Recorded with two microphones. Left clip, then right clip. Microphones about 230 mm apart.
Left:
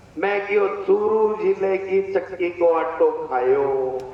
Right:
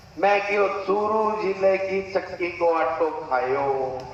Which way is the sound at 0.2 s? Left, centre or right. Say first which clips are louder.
Even; centre.